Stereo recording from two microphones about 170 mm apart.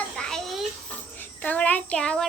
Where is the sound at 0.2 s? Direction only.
5° left (ahead or behind).